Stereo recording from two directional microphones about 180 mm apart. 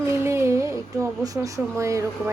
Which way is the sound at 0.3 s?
15° right (ahead or behind).